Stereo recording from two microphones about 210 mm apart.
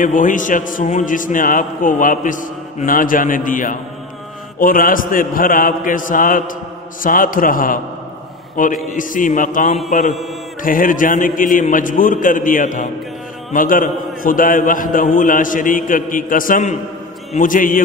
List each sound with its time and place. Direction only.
0.0 s a man's voice: 40° left (ahead or behind)